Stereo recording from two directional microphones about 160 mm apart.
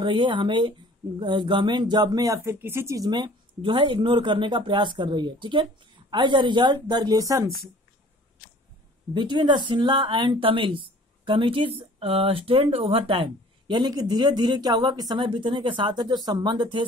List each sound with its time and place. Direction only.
0.0 s speech: 30° right (ahead or behind)
9.1 s speech: 30° right (ahead or behind)